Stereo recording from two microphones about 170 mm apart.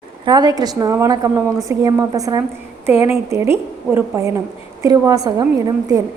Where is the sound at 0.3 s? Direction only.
25° right (ahead or behind).